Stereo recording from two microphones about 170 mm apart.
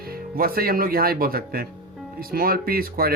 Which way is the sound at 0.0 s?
60° right (ahead or behind).